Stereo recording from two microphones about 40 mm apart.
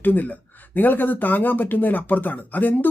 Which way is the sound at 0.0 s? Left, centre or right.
Left.